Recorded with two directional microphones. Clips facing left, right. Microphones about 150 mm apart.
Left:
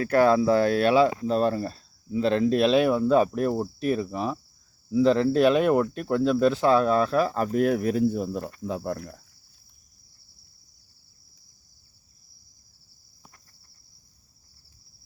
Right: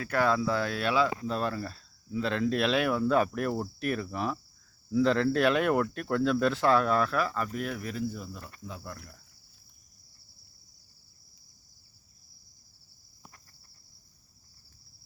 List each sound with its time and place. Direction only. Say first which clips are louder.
0.3 s speech: left 8 dB; 45° left (ahead or behind)
0.9 s speech: left 7 dB; 25° left (ahead or behind); by 8.7 s 60° left (ahead or behind)
8.7 s speech: left 15 dB; 40° left (ahead or behind)